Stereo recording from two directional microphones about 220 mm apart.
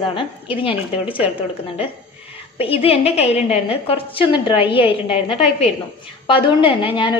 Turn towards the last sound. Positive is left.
turn(degrees=20)  # may be behind; listen again after turning